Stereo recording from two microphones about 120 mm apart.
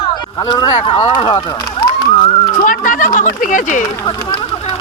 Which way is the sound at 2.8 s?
90° left.